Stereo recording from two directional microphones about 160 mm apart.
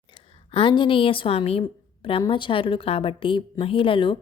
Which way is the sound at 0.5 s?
30° left (ahead or behind).